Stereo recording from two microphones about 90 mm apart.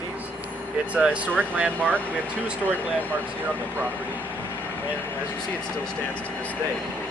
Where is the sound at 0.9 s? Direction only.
10° right (ahead or behind).